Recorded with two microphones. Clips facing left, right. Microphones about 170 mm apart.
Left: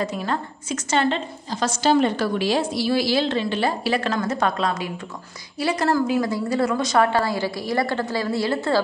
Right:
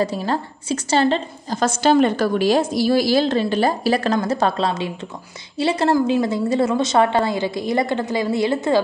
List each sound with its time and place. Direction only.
0.0 s a woman's voice: 35° right (ahead or behind)
1.6 s a woman's voice: 55° right (ahead or behind); by 8.8 s 20° right (ahead or behind)